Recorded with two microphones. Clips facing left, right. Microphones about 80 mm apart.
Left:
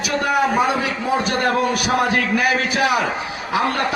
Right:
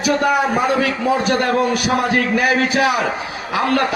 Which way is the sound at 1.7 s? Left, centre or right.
Left.